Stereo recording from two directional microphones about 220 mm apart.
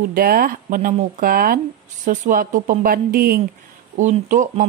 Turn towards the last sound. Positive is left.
turn(degrees=-30)  # may be behind; listen again after turning